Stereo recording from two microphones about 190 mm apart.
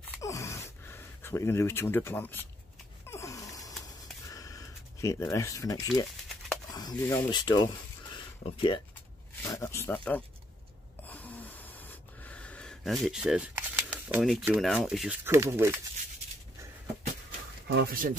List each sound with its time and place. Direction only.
0.1 s gasp: 15° left (ahead or behind)
3.1 s a sound: 15° left (ahead or behind)
6.7 s speech: 20° left (ahead or behind)
9.4 s speech: 15° left (ahead or behind)
11.1 s a sound: 10° left (ahead or behind)
14.5 s speech: centre (ahead or behind)
17.6 s speech: 55° right (ahead or behind)